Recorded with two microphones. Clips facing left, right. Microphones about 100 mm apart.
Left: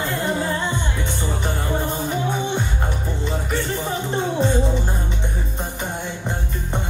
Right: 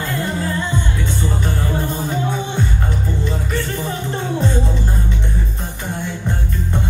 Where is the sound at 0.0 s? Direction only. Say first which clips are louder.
Even; 20° left (ahead or behind).